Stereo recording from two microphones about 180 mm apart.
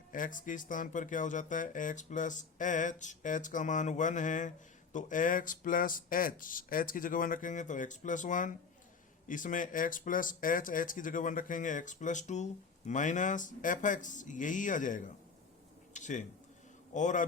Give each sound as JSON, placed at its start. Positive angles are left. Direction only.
{"t": 0.1, "sound": "speech", "side_deg": 45}
{"t": 15.9, "sound": "a sound", "side_deg": 40}
{"t": 16.9, "sound": "speech", "side_deg": 45}